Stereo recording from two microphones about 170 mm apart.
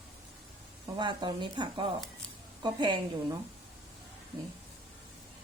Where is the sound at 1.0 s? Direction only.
25° right (ahead or behind).